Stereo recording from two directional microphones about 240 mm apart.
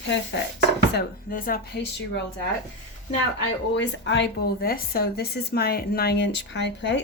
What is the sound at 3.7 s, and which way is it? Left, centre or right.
A woman's voice, left.